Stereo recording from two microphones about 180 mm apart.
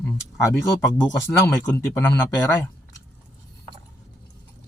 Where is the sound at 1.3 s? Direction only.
20° left (ahead or behind).